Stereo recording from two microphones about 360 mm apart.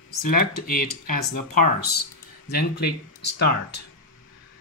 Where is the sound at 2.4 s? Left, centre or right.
Left.